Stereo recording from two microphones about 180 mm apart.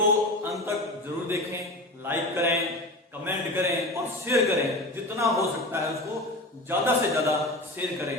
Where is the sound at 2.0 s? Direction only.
15° right (ahead or behind).